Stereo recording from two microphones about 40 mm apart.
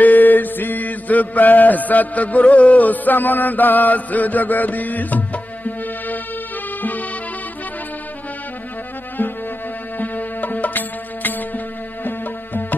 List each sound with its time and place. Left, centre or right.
0.0 s mantra: left
6.8 s music: left
9.9 s music: left